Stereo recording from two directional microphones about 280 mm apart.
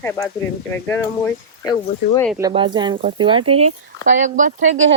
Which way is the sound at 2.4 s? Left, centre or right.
Centre.